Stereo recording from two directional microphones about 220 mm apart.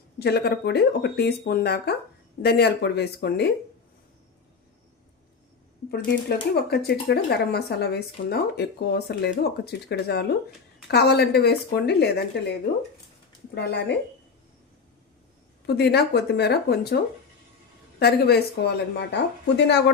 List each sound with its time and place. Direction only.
0.2 s speech: 50° left (ahead or behind)
6.2 s speech: 45° left (ahead or behind)
13.6 s speech: 50° left (ahead or behind)
15.6 s speech: 50° left (ahead or behind)
18.0 s speech: 50° left (ahead or behind)